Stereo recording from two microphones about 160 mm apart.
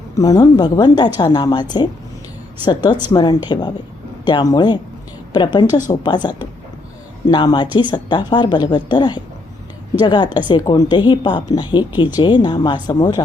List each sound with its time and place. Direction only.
0.2 s speech: 25° left (ahead or behind)